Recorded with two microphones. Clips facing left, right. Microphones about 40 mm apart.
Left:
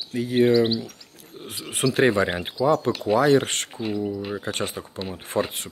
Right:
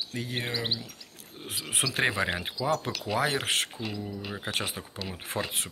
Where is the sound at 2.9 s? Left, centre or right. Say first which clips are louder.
Left 10 dB; left.